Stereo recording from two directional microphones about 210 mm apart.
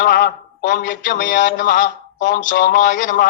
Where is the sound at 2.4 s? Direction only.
45° left (ahead or behind).